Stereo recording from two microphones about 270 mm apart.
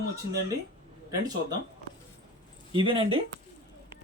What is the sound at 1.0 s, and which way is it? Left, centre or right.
Speech, centre.